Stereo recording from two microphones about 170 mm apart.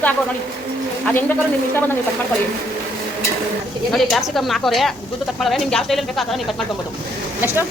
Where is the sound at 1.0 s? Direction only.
10° left (ahead or behind).